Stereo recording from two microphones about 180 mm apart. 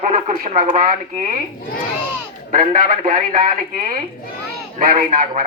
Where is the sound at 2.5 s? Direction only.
50° right (ahead or behind).